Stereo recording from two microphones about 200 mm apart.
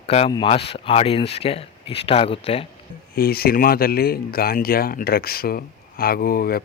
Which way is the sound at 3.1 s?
50° left (ahead or behind).